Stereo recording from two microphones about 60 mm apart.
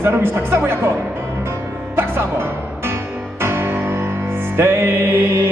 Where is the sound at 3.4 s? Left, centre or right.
Right.